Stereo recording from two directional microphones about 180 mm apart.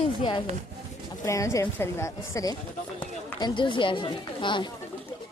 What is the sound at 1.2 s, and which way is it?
A woman's voice, 15° left (ahead or behind).